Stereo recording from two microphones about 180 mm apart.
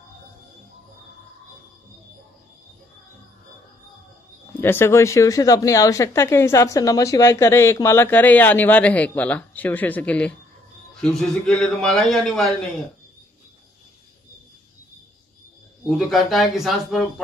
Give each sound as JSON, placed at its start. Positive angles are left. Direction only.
{"t": 4.6, "sound": "a woman's voice", "side_deg": 15}
{"t": 16.0, "sound": "a man's voice", "side_deg": 0}